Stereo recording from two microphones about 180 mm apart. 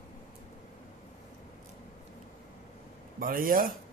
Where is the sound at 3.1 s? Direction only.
50° right (ahead or behind).